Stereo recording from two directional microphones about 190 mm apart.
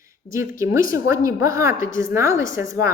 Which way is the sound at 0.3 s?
15° right (ahead or behind).